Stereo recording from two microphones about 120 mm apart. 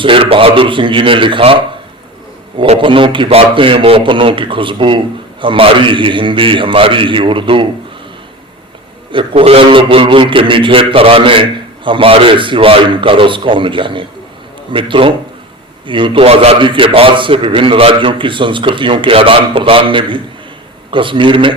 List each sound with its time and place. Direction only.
0.0 s a man's voice: 50° right (ahead or behind)
2.6 s a man's voice: 45° right (ahead or behind)
9.1 s a man's voice: 55° right (ahead or behind)